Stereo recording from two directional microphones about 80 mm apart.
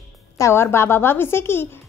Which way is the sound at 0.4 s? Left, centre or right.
Left.